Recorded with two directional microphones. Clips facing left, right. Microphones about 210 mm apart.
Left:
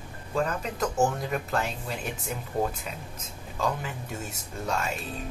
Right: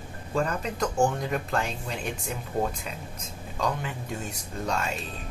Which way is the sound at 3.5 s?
5° left (ahead or behind).